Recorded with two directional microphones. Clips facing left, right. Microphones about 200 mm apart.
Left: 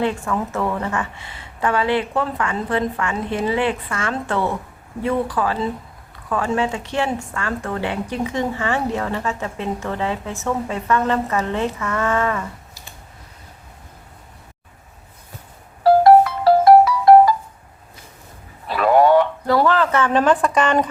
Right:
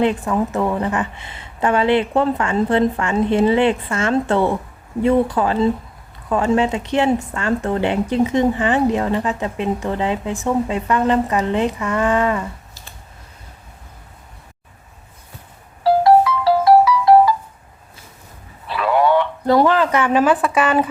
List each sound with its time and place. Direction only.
0.0 s a woman's voice: 20° right (ahead or behind)
15.8 s music: 55° left (ahead or behind)
18.7 s radio: 45° left (ahead or behind)
19.5 s speech: 20° right (ahead or behind)